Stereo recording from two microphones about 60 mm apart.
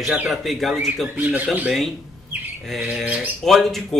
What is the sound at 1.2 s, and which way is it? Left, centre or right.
Speech, right.